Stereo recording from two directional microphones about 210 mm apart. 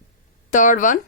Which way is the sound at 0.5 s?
40° left (ahead or behind).